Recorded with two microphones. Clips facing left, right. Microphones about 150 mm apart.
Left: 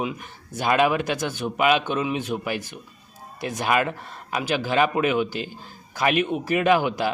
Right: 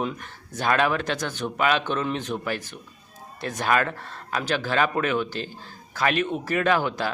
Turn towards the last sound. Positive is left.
turn(degrees=10)  # may be behind; listen again after turning